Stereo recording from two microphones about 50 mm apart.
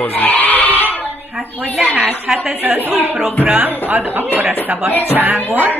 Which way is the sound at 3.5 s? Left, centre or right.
Right.